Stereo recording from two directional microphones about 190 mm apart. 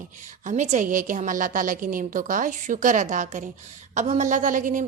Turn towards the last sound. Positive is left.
turn(degrees=-45)  # may be behind; listen again after turning